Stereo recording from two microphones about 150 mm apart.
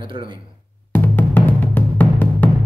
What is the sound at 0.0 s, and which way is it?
Speech, 30° right (ahead or behind).